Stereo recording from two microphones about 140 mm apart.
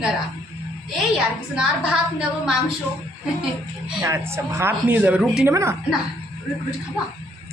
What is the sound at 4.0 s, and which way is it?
A man's voice, 20° right (ahead or behind).